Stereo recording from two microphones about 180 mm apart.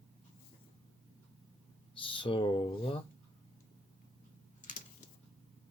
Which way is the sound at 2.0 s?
30° left (ahead or behind).